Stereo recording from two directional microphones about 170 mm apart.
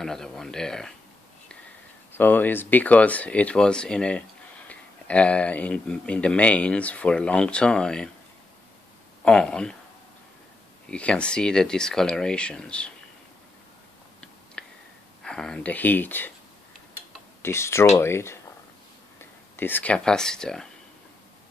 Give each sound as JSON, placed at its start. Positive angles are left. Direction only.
{"t": 0.0, "sound": "speech", "side_deg": 0}
{"t": 2.1, "sound": "speech", "side_deg": 10}
{"t": 9.2, "sound": "speech", "side_deg": 5}
{"t": 10.9, "sound": "speech", "side_deg": 5}
{"t": 14.6, "sound": "a sound", "side_deg": 5}
{"t": 15.2, "sound": "speech", "side_deg": 5}
{"t": 17.4, "sound": "speech", "side_deg": 15}